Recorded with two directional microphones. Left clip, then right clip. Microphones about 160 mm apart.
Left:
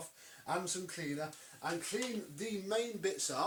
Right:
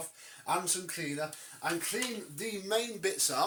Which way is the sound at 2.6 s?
30° right (ahead or behind).